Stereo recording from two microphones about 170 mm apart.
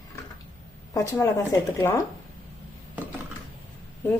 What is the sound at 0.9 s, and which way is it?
Speech, 20° left (ahead or behind).